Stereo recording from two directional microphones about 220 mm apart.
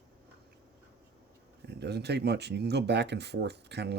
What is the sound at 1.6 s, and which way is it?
Speech, 50° right (ahead or behind).